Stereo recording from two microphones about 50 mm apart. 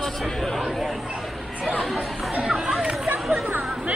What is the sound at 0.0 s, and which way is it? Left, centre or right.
Chatter, centre.